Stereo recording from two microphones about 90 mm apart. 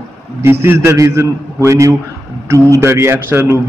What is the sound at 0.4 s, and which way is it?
Speech, 25° right (ahead or behind).